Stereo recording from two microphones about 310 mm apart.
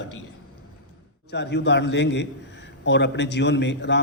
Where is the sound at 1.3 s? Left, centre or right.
Left.